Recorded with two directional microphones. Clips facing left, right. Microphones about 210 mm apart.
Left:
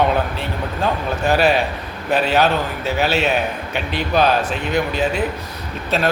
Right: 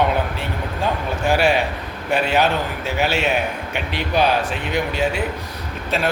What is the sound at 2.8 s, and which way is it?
A man's voice, 15° right (ahead or behind).